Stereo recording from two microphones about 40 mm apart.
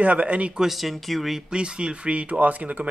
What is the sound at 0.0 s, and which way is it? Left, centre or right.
Speech, right.